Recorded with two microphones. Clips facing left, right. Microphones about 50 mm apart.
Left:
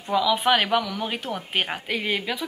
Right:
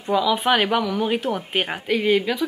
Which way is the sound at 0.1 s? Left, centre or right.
Centre.